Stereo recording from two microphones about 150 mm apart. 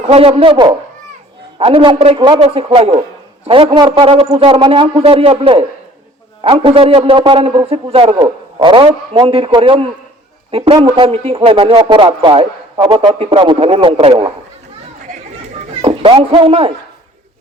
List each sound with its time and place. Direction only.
0.1 s speech: 40° right (ahead or behind)
15.8 s speech: 35° right (ahead or behind)